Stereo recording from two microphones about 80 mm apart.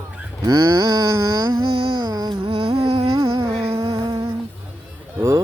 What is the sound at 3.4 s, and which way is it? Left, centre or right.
Music, right.